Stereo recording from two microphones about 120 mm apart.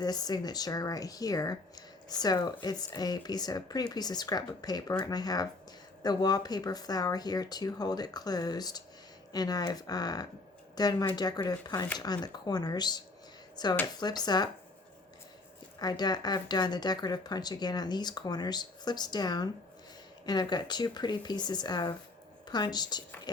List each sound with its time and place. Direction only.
0.0 s speech: 35° left (ahead or behind)
15.8 s speech: 35° left (ahead or behind)